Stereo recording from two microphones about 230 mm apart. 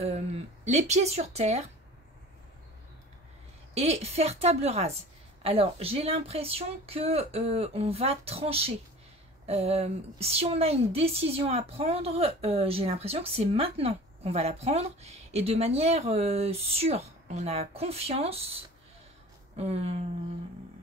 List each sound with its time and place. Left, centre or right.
0.7 s a woman's voice: right
3.7 s a woman's voice: right